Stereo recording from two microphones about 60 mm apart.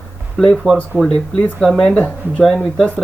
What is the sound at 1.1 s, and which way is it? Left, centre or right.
Speech, left.